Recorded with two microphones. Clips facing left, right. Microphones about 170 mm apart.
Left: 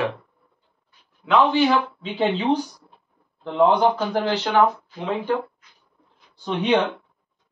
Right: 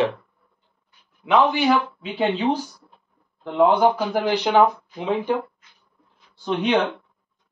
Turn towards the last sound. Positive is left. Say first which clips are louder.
# even
turn(degrees=0)  # may be behind; listen again after turning